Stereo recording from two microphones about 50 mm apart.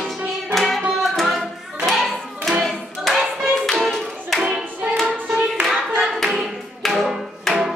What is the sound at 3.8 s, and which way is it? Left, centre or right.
Clapping, centre.